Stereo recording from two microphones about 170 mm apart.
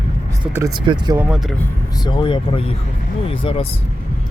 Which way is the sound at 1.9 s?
25° left (ahead or behind).